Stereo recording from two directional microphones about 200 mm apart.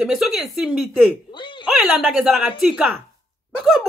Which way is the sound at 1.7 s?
5° right (ahead or behind).